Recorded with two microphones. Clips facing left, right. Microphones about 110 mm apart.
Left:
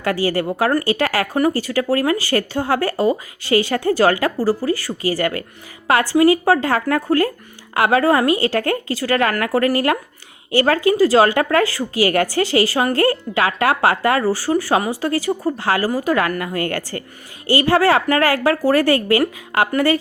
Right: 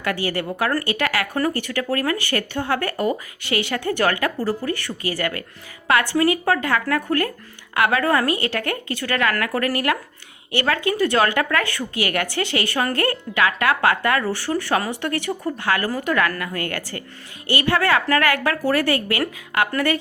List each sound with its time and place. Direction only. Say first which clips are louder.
0.0 s a woman's voice: left 5 dB; 35° left (ahead or behind)